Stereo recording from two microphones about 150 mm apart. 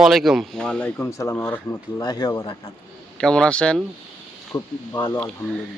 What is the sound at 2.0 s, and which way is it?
Speech, 30° left (ahead or behind).